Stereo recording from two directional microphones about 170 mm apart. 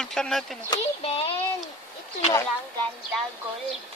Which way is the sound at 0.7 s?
30° left (ahead or behind).